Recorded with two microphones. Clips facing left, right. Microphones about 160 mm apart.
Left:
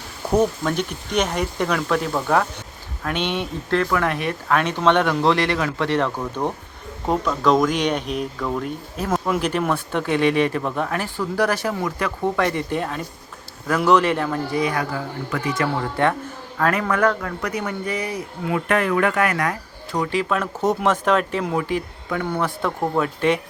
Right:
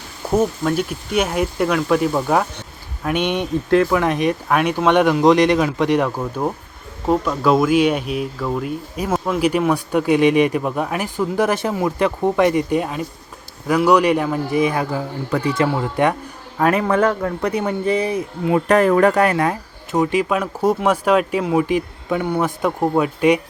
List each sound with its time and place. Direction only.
0.3 s a man's voice: 5° right (ahead or behind); by 15.7 s 30° right (ahead or behind)
16.0 s a man's voice: 15° right (ahead or behind)
18.7 s speech: 40° right (ahead or behind); by 23.4 s 10° right (ahead or behind)